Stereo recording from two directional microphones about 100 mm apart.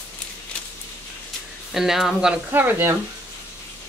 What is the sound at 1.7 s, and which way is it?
Speech, 5° right (ahead or behind).